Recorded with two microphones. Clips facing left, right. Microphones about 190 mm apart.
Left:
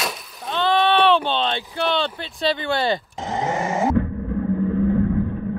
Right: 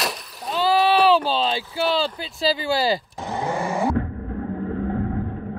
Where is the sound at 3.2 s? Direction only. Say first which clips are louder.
Left 2 dB; 20° left (ahead or behind).